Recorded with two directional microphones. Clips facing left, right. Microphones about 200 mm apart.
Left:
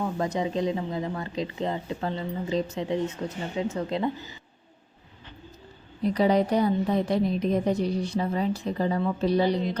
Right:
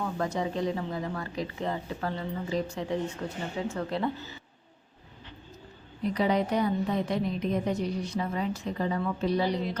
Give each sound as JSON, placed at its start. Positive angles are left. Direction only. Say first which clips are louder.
{"t": 0.0, "sound": "speech", "louder": "left 3 dB", "side_deg": 20}
{"t": 6.0, "sound": "a woman's voice", "louder": "left 4 dB", "side_deg": 35}